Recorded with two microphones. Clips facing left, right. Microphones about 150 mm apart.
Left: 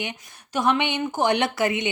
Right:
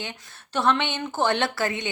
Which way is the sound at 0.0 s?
15° left (ahead or behind).